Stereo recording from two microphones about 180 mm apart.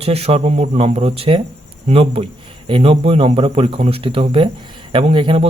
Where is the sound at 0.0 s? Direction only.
35° right (ahead or behind).